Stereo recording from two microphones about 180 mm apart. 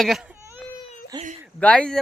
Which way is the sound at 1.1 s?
20° right (ahead or behind).